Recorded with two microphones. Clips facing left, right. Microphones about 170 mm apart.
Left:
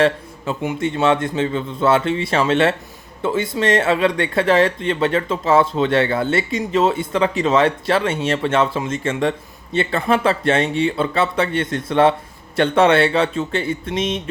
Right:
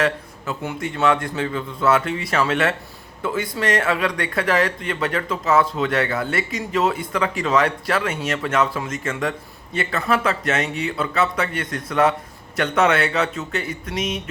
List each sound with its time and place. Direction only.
0.6 s speech: 20° left (ahead or behind)